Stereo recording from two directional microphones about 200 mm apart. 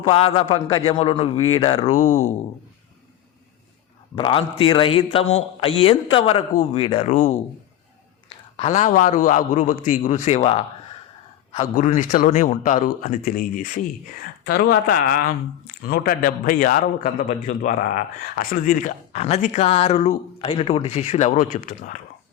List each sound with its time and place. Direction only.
0.1 s a man's voice: 30° left (ahead or behind)
1.9 s speech: 90° left
4.1 s a man's voice: 25° left (ahead or behind)
7.1 s speech: 40° left (ahead or behind)